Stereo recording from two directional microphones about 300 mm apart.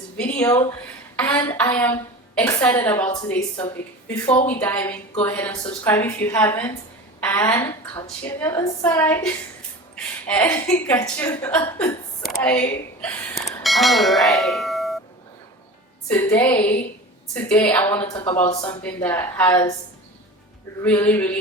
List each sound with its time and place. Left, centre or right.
0.2 s a woman's voice: centre
16.0 s a woman's voice: centre
18.7 s a woman's voice: centre
20.8 s a woman's voice: centre